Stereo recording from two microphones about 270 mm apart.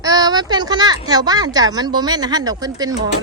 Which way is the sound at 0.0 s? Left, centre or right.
Centre.